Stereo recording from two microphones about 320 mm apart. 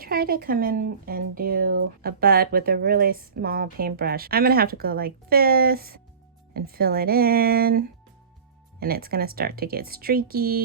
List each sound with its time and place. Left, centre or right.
0.0 s speech: right